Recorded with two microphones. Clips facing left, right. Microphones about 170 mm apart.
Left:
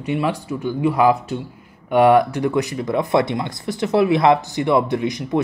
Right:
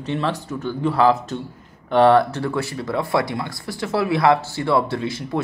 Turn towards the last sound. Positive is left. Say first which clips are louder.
# left 4 dB
turn(degrees=20)  # may be behind; listen again after turning